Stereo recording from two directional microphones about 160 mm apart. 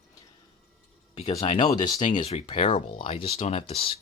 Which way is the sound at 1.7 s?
25° left (ahead or behind).